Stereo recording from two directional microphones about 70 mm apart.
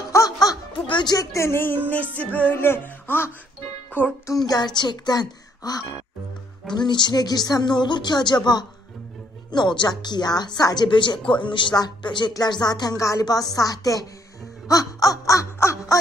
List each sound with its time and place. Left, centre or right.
0.1 s music: left
1.4 s music: left
1.9 s music: left
2.5 s music: left
4.3 s speech: left
6.7 s speech: left
9.5 s speech: left
13.2 s wail: left